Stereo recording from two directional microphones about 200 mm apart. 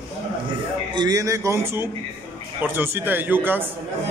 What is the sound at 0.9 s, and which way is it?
A man's voice, 20° right (ahead or behind).